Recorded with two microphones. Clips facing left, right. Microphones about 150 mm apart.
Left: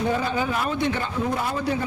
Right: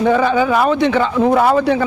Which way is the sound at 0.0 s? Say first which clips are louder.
Right 10 dB; 85° right.